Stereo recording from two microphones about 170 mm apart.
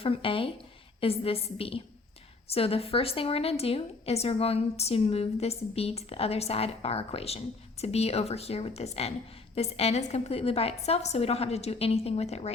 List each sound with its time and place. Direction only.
0.0 s a woman's voice: 30° left (ahead or behind)